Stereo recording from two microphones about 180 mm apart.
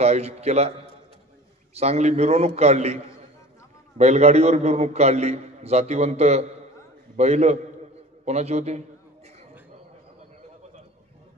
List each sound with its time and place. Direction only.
0.0 s a man's voice: 35° right (ahead or behind)
4.0 s a man's voice: 40° right (ahead or behind)